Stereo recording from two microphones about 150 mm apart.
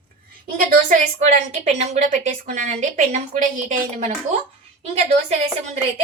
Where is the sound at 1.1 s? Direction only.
50° right (ahead or behind).